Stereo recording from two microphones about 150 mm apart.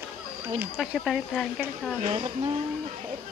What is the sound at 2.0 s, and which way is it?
Speech, 35° right (ahead or behind).